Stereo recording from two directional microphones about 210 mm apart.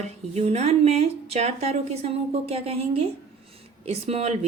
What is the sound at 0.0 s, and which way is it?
Speech, 30° right (ahead or behind).